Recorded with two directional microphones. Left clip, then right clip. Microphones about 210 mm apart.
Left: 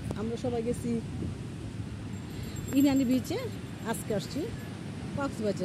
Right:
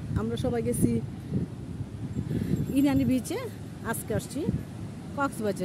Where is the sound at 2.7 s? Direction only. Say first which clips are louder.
Even; centre (ahead or behind).